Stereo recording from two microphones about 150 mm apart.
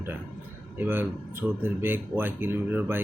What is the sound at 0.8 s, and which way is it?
Speech, 15° right (ahead or behind).